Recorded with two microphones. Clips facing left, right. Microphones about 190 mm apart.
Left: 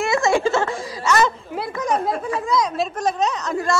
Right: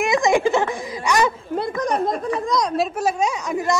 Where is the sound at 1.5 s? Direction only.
5° left (ahead or behind).